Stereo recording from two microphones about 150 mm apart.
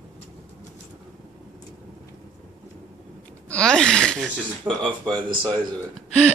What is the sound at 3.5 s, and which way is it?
Gasp, 5° left (ahead or behind).